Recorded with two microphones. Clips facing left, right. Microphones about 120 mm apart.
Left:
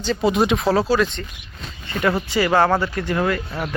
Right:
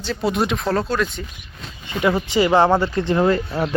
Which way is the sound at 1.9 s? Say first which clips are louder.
Right 1 dB; 15° right (ahead or behind).